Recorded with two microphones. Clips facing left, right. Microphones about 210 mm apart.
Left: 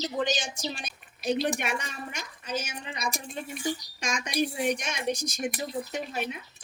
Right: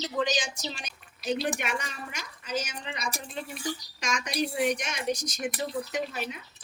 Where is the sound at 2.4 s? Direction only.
35° left (ahead or behind).